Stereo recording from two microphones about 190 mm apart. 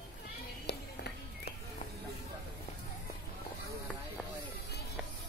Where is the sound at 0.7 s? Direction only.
60° left (ahead or behind).